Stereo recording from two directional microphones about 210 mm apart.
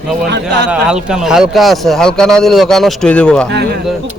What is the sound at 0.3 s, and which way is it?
Speech, 55° right (ahead or behind).